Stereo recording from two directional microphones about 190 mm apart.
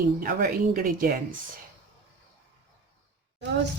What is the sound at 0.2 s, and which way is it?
Speech, 45° right (ahead or behind).